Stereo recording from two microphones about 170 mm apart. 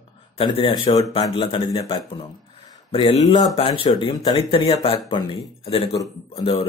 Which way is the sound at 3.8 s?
25° left (ahead or behind).